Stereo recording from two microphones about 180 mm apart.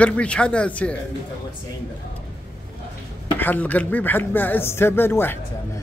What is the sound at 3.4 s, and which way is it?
Speech, 10° left (ahead or behind).